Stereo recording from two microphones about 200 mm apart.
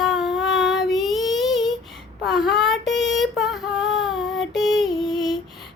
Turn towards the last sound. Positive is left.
turn(degrees=0)  # may be behind; listen again after turning